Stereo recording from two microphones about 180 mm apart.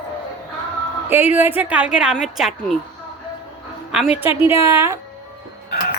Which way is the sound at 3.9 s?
5° right (ahead or behind).